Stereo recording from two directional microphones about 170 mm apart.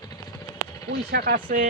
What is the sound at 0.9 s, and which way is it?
Speech, 70° right (ahead or behind).